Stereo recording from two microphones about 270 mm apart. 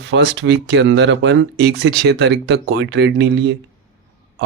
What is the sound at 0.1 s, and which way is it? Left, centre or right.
Speech, right.